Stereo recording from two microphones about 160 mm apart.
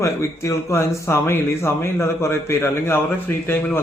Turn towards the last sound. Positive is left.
turn(degrees=15)  # may be behind; listen again after turning